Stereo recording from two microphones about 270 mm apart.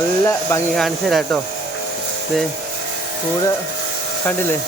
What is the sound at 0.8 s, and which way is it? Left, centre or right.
Speech, centre.